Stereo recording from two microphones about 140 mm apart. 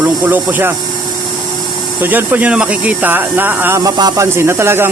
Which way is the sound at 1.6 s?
30° right (ahead or behind).